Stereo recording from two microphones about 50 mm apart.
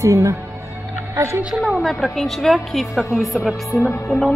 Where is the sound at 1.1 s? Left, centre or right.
Right.